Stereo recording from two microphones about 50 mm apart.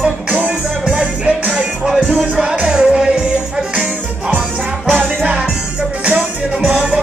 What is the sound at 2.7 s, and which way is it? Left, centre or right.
Music, centre.